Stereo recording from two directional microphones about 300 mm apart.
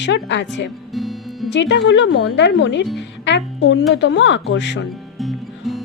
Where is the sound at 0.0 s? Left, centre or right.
Left.